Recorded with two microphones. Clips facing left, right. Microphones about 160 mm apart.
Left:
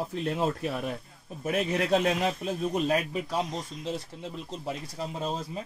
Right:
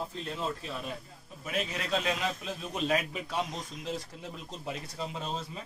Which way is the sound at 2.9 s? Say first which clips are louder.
Left 3 dB; 35° left (ahead or behind).